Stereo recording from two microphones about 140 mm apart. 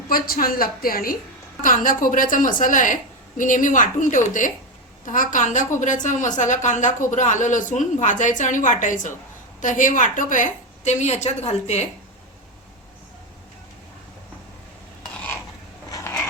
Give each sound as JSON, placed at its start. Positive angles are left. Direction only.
{"t": 0.1, "sound": "a woman's voice", "side_deg": 90}
{"t": 1.6, "sound": "a woman's voice", "side_deg": 75}
{"t": 15.9, "sound": "a sound", "side_deg": 25}